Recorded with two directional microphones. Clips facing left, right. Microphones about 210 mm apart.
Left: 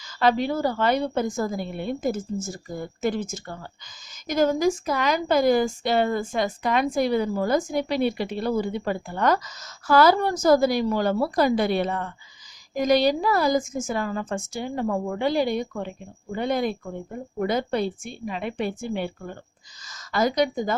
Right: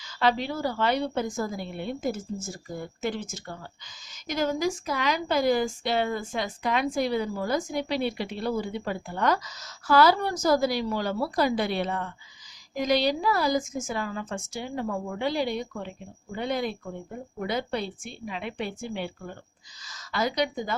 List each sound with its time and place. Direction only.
0.0 s a woman's voice: 45° left (ahead or behind)